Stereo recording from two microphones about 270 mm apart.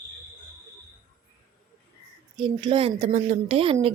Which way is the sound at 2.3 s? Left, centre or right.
Centre.